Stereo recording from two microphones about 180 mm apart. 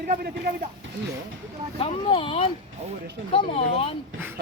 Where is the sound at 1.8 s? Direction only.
30° left (ahead or behind).